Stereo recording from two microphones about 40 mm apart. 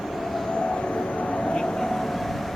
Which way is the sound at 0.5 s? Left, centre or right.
Left.